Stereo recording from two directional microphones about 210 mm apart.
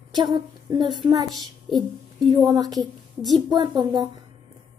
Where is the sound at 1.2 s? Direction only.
Centre (ahead or behind).